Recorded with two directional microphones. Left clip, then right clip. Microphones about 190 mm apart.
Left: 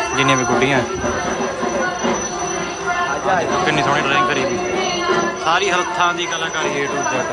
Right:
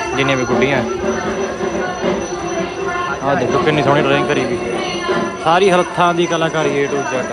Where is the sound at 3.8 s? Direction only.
10° left (ahead or behind).